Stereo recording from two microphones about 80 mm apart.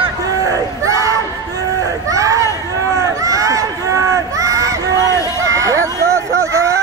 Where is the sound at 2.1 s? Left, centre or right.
Right.